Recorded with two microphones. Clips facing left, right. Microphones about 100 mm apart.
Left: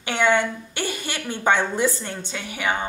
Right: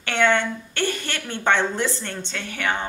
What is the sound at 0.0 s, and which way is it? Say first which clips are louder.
A woman's voice: even; 10° left (ahead or behind).